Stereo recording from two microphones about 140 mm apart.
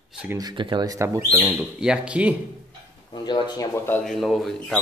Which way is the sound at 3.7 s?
15° left (ahead or behind).